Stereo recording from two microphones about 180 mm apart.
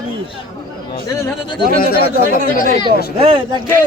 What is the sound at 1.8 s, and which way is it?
Speech, 60° left (ahead or behind).